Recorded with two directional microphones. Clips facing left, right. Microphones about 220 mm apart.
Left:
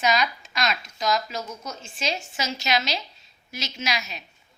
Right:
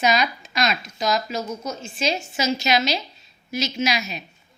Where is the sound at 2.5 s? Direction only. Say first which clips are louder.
Right 5 dB; 5° right (ahead or behind).